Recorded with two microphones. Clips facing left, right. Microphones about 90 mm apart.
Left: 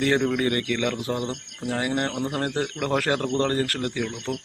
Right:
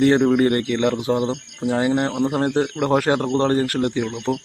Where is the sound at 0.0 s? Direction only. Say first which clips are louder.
Right 7 dB; 30° right (ahead or behind).